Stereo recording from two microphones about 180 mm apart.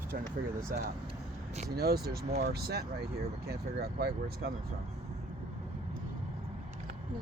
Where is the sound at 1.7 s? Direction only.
60° right (ahead or behind).